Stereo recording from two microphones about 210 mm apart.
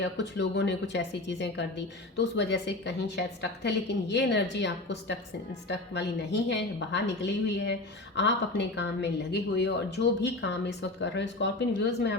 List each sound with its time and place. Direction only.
0.0 s a woman's voice: 55° left (ahead or behind)